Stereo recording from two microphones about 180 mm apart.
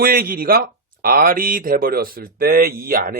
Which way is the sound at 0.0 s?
55° right (ahead or behind).